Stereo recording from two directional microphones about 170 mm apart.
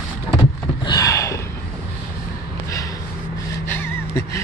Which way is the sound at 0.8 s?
20° left (ahead or behind).